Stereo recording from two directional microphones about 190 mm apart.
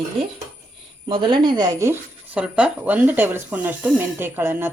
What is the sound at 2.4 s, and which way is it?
Speech, 5° right (ahead or behind).